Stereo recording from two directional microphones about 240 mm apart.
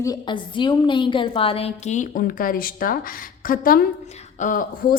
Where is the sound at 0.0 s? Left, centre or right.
Centre.